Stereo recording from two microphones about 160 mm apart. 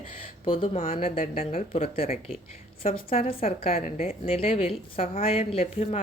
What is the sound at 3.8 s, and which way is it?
Speech, 60° left (ahead or behind).